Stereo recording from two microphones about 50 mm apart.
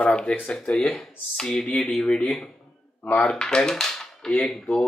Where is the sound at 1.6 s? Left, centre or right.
Left.